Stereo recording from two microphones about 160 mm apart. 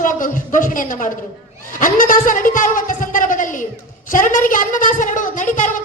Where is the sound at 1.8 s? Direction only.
55° left (ahead or behind).